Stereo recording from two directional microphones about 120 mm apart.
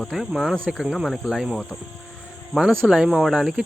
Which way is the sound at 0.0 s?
Centre (ahead or behind).